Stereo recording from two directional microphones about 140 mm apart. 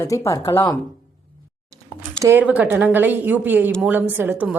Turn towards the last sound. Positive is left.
turn(degrees=-15)  # may be behind; listen again after turning